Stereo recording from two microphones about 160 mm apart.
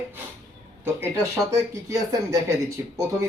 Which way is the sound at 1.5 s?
20° right (ahead or behind).